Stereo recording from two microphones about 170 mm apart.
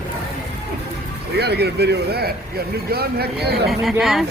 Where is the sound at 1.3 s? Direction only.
75° right (ahead or behind).